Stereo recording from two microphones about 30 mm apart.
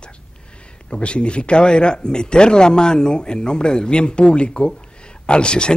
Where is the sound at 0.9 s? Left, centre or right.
Left.